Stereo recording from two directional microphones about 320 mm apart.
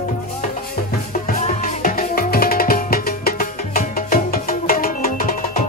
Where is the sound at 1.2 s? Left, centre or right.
Left.